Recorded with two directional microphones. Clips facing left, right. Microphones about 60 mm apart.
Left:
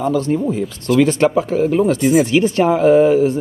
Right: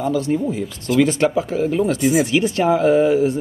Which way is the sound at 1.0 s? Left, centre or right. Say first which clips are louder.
Left 3 dB; left.